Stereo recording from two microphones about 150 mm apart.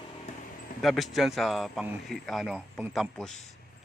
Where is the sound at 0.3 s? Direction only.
50° left (ahead or behind).